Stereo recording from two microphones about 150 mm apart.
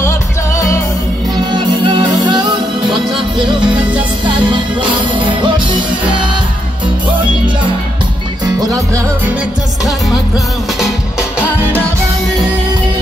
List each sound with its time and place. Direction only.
0.6 s music: 20° left (ahead or behind)
1.3 s music: 30° right (ahead or behind)
8.5 s music: 25° right (ahead or behind)